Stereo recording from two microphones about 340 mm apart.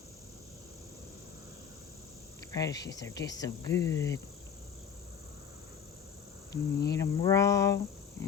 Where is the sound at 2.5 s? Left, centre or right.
Centre.